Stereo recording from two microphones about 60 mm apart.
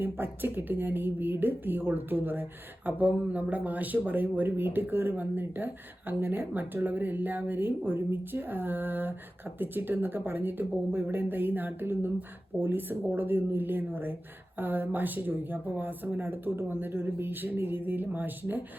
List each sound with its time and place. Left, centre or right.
0.0 s speech: right